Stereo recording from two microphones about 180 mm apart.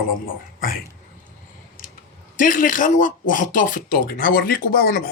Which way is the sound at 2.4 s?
50° left (ahead or behind).